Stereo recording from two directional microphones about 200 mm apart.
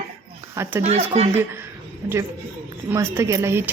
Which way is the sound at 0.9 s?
35° right (ahead or behind).